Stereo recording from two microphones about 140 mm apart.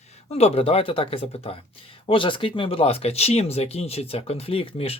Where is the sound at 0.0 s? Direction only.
50° left (ahead or behind).